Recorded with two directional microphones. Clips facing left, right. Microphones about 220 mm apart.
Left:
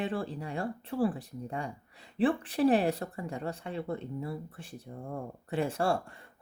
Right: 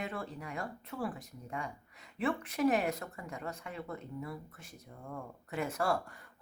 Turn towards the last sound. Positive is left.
turn(degrees=25)  # may be behind; listen again after turning